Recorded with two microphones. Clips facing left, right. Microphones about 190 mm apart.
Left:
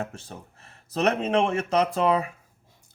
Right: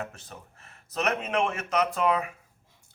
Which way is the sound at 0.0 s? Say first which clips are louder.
Left 4 dB; 30° left (ahead or behind).